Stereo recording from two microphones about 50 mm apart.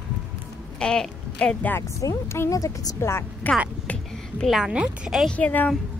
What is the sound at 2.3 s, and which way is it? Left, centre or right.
Speech, left.